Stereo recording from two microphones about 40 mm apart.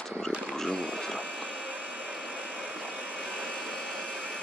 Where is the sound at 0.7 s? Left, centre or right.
Left.